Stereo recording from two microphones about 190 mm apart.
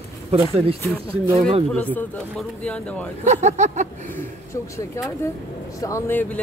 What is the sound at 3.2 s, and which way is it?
Speech, 40° right (ahead or behind).